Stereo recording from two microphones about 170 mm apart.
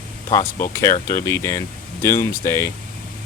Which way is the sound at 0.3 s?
20° left (ahead or behind).